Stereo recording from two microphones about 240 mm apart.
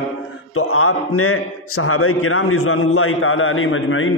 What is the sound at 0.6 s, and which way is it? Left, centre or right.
A man's voice, left.